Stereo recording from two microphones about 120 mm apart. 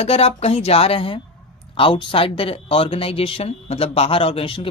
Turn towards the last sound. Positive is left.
turn(degrees=50)  # may be behind; listen again after turning